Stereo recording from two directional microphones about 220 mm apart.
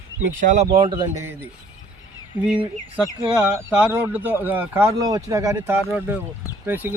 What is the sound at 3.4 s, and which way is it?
Speech, 5° right (ahead or behind).